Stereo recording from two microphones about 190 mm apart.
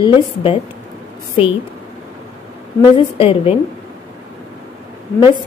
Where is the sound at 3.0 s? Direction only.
30° left (ahead or behind).